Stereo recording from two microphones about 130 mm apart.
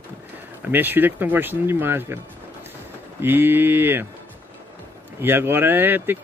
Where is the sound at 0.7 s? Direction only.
15° right (ahead or behind).